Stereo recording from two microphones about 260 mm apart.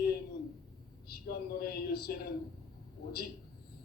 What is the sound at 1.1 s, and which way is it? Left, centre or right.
A man's voice, left.